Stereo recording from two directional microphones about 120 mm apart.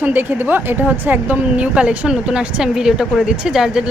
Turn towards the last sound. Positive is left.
turn(degrees=-5)  # may be behind; listen again after turning